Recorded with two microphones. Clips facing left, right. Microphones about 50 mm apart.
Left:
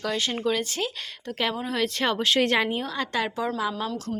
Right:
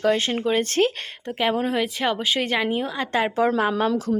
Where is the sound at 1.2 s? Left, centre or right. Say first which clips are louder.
Right 5 dB; right.